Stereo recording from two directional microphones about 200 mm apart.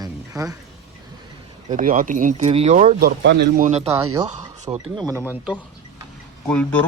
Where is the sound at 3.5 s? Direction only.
35° right (ahead or behind).